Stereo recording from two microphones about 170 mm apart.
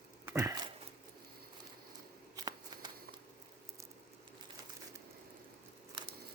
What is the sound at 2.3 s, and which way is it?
Shuffling cards, 25° right (ahead or behind).